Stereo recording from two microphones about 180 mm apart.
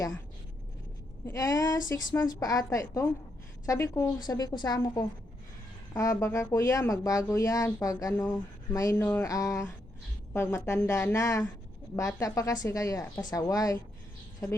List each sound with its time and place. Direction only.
1.3 s a woman's voice: 20° left (ahead or behind)